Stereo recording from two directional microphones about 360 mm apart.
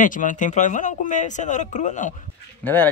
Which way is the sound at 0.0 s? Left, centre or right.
Left.